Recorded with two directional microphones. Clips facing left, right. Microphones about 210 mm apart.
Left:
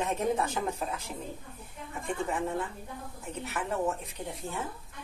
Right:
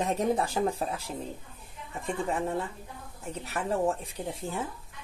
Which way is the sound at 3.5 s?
30° right (ahead or behind).